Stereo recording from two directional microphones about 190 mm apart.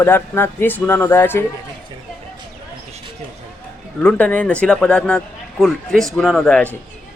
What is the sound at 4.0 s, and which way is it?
Speech, 5° left (ahead or behind).